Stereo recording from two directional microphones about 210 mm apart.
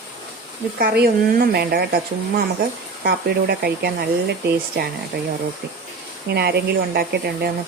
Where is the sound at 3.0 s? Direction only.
50° right (ahead or behind).